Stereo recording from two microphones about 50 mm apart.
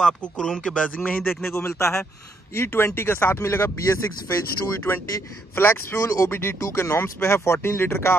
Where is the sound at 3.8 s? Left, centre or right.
Left.